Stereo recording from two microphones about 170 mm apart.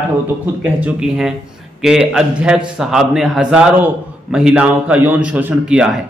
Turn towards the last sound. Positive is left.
turn(degrees=-5)  # may be behind; listen again after turning